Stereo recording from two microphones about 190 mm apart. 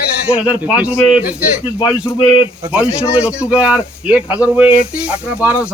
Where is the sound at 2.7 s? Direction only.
5° right (ahead or behind).